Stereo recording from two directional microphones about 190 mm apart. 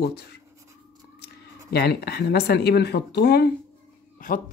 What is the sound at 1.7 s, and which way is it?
Speech, 55° left (ahead or behind).